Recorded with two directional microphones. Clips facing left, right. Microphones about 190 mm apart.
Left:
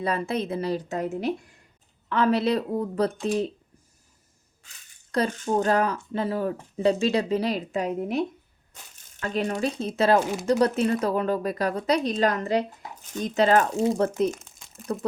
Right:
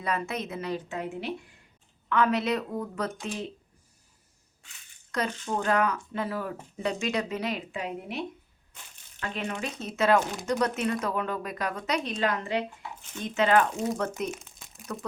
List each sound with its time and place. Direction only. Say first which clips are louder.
0.0 s speech: left 5 dB; 30° left (ahead or behind)
2.0 s speech: left 3 dB; 30° left (ahead or behind)
5.1 s speech: left 6 dB; 35° left (ahead or behind)
9.2 s speech: left 7 dB; 40° left (ahead or behind)
14.3 s speech: left 7 dB; centre (ahead or behind)
14.9 s speech: left 7 dB; 35° left (ahead or behind)